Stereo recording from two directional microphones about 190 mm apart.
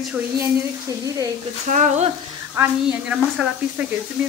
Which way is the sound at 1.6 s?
40° right (ahead or behind).